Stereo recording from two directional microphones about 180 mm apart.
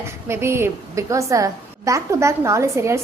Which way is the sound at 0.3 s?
15° right (ahead or behind).